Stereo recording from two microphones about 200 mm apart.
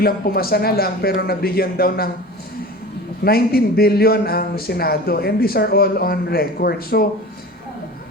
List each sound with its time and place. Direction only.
0.0 s speech: 50° left (ahead or behind)
3.2 s speech: 50° left (ahead or behind)